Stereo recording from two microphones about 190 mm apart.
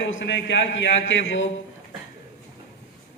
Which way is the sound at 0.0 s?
75° left (ahead or behind).